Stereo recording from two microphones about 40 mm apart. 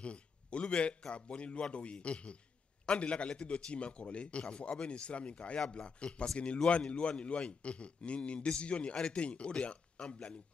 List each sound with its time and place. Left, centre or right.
0.0 s a man's voice: left